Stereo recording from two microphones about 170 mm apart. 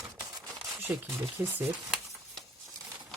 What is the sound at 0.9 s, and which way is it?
Speech, 10° right (ahead or behind).